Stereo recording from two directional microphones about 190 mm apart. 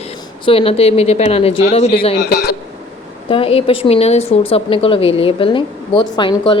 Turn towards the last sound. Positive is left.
turn(degrees=25)  # may be behind; listen again after turning